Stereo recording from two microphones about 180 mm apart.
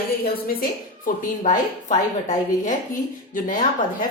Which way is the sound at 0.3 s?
55° left (ahead or behind).